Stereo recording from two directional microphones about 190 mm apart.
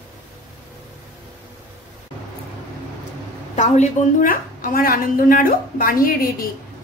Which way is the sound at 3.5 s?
40° left (ahead or behind).